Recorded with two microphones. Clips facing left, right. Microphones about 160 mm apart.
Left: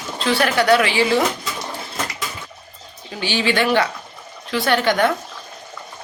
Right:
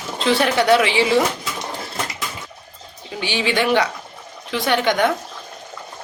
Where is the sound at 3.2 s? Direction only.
15° right (ahead or behind).